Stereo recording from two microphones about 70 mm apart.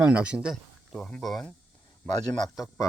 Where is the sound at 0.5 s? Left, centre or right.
Centre.